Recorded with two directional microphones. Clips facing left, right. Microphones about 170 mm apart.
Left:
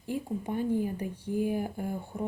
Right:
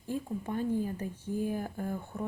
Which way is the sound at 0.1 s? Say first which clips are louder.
Left 2 dB; 15° left (ahead or behind).